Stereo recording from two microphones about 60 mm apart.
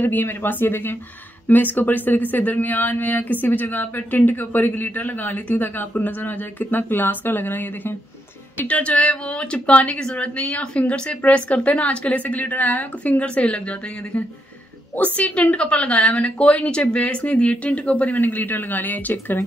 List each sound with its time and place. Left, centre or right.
0.0 s speech: left
8.5 s speech: left